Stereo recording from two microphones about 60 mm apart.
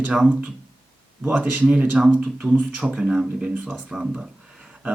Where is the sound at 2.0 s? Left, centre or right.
Centre.